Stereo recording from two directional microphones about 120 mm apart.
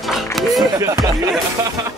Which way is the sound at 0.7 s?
30° right (ahead or behind).